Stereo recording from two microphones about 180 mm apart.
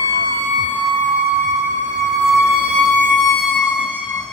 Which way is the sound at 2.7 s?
Centre (ahead or behind).